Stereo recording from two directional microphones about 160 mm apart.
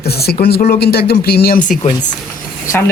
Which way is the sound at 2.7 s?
15° left (ahead or behind).